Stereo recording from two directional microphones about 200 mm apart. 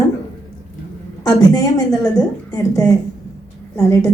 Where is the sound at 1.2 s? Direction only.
20° left (ahead or behind).